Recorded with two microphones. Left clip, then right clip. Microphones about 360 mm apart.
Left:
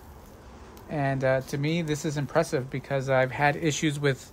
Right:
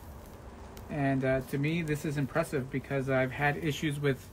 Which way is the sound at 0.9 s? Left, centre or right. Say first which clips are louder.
Left 4 dB; centre.